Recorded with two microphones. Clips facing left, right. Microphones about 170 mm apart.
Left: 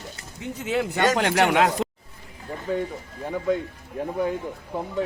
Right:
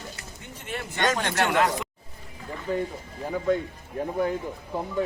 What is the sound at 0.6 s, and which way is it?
Speech, 85° left.